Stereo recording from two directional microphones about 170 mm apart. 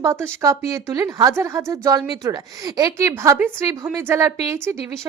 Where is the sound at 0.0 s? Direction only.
15° right (ahead or behind).